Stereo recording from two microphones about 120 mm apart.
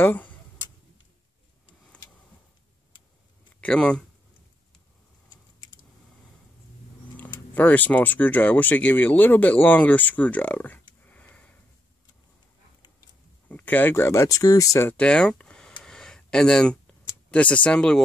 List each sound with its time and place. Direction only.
0.0 s speech: 15° left (ahead or behind)
3.6 s speech: 10° left (ahead or behind)
5.6 s typing: 35° left (ahead or behind)
7.2 s speech: 15° left (ahead or behind)
11.1 s sniff: 10° left (ahead or behind)
13.5 s speech: 15° left (ahead or behind)
15.8 s a sound: 5° left (ahead or behind)
17.3 s speech: 10° left (ahead or behind)